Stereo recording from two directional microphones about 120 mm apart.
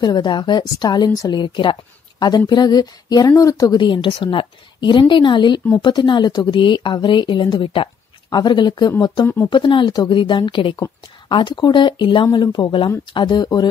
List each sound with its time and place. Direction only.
0.0 s a woman's voice: 35° left (ahead or behind)
9.2 s speech: 20° left (ahead or behind)
9.5 s a woman's voice: 40° left (ahead or behind)